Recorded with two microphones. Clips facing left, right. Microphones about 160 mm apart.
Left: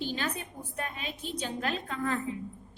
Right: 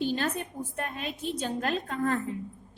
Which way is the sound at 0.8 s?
50° right (ahead or behind).